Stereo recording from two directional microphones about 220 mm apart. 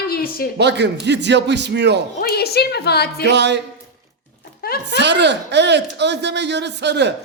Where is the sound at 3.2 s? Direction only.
50° right (ahead or behind).